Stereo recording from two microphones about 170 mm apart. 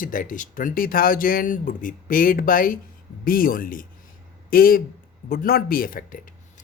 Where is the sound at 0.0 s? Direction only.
55° left (ahead or behind).